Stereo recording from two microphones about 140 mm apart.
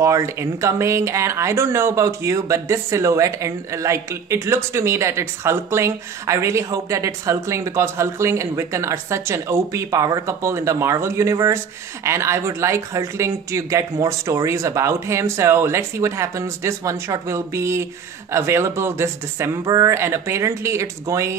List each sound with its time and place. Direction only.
0.0 s speech: 20° right (ahead or behind)